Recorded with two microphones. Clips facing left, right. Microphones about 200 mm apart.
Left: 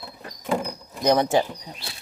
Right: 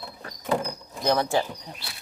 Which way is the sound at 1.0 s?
15° left (ahead or behind).